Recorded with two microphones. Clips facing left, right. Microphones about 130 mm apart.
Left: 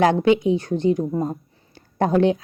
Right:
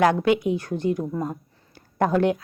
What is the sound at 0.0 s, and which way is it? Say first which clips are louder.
Speech: left 3 dB; 25° left (ahead or behind).